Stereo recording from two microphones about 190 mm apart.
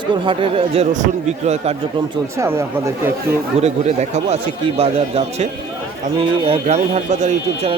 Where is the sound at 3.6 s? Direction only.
35° right (ahead or behind).